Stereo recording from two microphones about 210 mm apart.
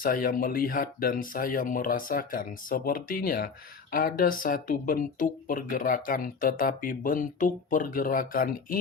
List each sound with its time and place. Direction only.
0.0 s speech: 45° left (ahead or behind)